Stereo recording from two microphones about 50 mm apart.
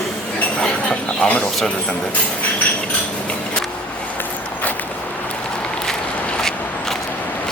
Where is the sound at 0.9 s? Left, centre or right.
Left.